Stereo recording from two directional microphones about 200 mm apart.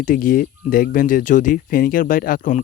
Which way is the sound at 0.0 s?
40° left (ahead or behind).